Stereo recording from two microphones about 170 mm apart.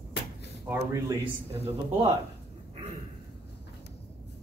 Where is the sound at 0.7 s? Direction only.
20° right (ahead or behind).